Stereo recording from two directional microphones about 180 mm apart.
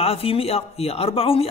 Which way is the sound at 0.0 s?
30° left (ahead or behind).